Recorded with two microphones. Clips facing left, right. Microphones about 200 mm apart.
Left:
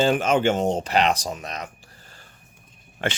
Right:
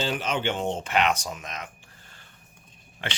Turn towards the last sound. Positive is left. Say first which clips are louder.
# left 8 dB
turn(degrees=45)  # may be behind; listen again after turning